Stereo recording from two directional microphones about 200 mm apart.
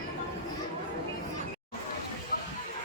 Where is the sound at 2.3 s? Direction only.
50° left (ahead or behind).